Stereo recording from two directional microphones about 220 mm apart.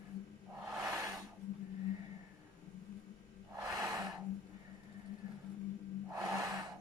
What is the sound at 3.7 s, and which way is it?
Gasp, 15° right (ahead or behind).